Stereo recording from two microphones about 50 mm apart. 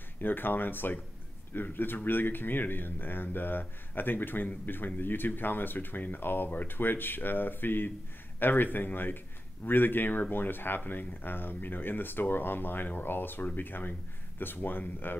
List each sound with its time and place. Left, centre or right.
0.2 s speech: left